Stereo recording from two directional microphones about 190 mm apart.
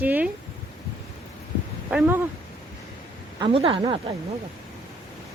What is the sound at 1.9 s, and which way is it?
Speech, 5° right (ahead or behind).